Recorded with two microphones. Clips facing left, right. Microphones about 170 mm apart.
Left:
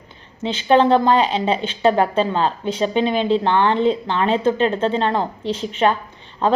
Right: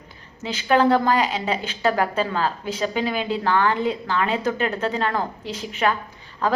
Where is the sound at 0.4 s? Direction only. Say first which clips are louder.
Left 3 dB; 25° left (ahead or behind).